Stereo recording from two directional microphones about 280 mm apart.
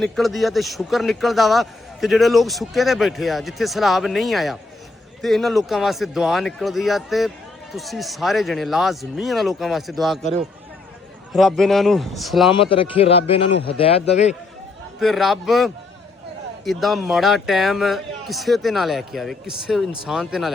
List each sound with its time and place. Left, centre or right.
0.0 s speech: centre
12.5 s a man's voice: centre
14.9 s speech: centre